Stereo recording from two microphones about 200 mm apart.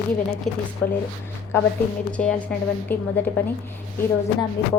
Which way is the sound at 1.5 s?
10° left (ahead or behind).